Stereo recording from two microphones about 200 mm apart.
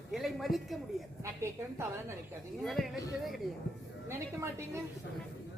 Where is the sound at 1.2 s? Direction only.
15° right (ahead or behind).